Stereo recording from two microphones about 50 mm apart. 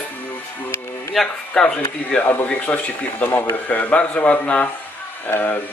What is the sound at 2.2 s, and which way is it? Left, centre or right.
Speech, left.